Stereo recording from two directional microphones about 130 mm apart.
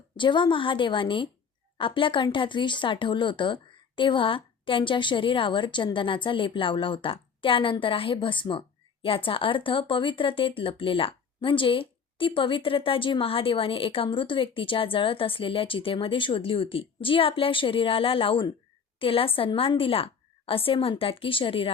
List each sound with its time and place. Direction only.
0.2 s a woman's voice: 35° left (ahead or behind)